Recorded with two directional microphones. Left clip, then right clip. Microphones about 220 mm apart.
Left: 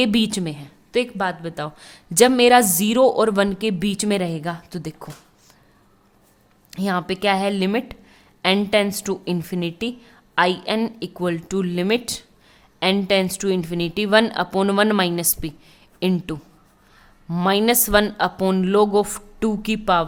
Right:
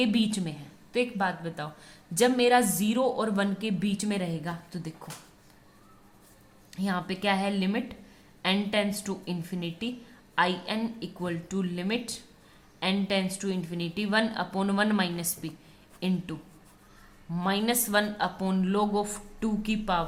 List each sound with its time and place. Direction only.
0.0 s a woman's voice: 45° left (ahead or behind)
6.7 s a woman's voice: 45° left (ahead or behind)